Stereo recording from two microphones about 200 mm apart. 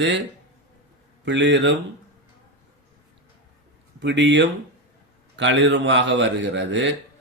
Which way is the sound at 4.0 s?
60° right (ahead or behind).